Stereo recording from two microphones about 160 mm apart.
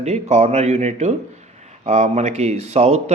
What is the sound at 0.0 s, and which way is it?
Speech, 45° right (ahead or behind).